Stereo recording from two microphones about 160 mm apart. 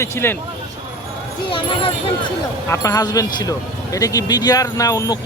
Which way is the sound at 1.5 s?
35° left (ahead or behind).